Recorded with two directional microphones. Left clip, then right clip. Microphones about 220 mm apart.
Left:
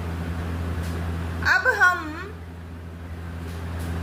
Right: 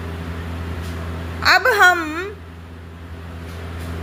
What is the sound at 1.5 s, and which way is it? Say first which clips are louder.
Speech: right 6 dB; 45° right (ahead or behind).